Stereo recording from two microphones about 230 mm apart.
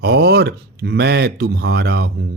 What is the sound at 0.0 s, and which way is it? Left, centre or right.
Speech, right.